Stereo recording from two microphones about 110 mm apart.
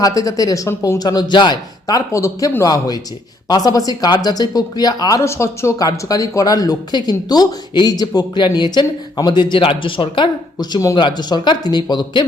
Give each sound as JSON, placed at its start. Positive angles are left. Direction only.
{"t": 0.0, "sound": "speech", "side_deg": 35}